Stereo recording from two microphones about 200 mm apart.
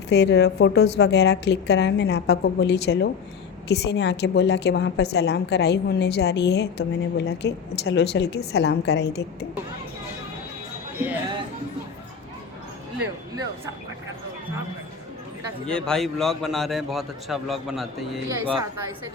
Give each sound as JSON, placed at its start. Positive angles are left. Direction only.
{"t": 0.1, "sound": "a woman's voice", "side_deg": 55}
{"t": 10.9, "sound": "speech", "side_deg": -10}
{"t": 15.6, "sound": "a man's voice", "side_deg": 5}